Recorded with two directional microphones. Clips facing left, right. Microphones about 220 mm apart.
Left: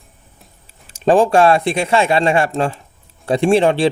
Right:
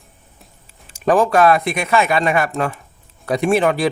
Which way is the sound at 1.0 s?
30° left (ahead or behind).